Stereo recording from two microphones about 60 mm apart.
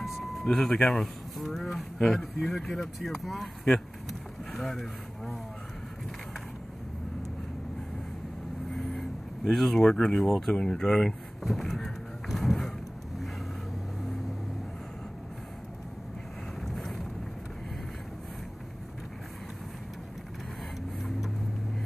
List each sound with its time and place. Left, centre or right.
0.0 s music: centre
1.4 s speech: centre
8.7 s a sound: centre
10.5 s speech: centre
16.6 s boat: centre